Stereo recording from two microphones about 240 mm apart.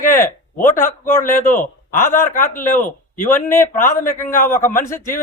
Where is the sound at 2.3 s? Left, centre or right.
Left.